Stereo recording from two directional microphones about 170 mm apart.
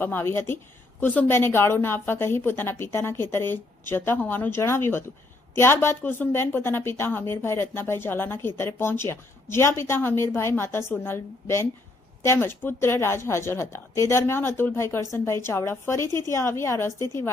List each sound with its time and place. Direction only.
0.0 s a woman's voice: 10° left (ahead or behind)